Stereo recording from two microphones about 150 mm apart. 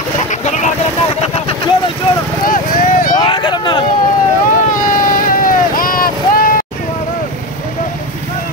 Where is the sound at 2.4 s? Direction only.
65° left (ahead or behind).